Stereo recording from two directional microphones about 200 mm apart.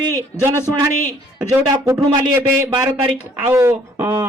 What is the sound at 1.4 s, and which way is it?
A man's voice, 15° right (ahead or behind).